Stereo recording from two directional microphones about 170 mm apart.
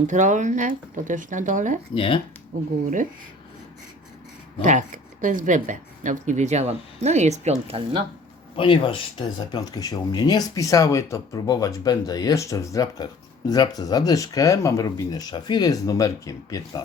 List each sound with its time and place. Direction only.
0.1 s speech: 45° right (ahead or behind)
2.0 s speech: 30° left (ahead or behind)
4.6 s speech: 50° right (ahead or behind)
8.5 s speech: 30° left (ahead or behind)